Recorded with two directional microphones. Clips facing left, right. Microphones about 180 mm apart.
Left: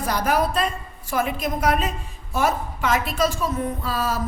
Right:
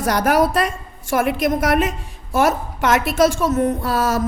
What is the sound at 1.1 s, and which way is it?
A woman's voice, 80° right.